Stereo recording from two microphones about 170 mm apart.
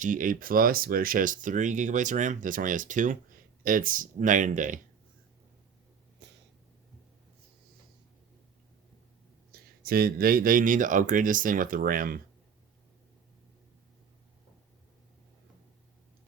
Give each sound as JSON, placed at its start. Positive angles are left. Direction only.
{"t": 0.0, "sound": "speech", "side_deg": -50}
{"t": 6.2, "sound": "a sound", "side_deg": -90}
{"t": 9.5, "sound": "speech", "side_deg": -65}